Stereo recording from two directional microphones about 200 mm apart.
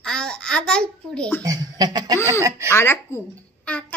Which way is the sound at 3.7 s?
5° left (ahead or behind).